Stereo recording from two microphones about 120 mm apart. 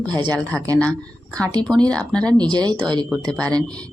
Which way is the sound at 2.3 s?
35° right (ahead or behind).